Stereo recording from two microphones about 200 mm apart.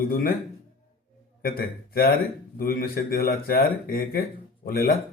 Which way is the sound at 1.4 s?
45° left (ahead or behind).